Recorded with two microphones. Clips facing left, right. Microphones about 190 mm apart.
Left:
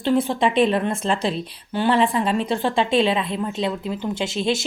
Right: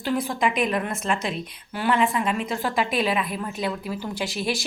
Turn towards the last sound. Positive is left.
turn(degrees=25)  # may be behind; listen again after turning